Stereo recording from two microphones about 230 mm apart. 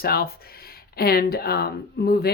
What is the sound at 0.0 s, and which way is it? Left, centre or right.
Speech, left.